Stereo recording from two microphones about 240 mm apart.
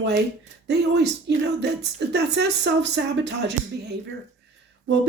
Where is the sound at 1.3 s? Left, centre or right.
Right.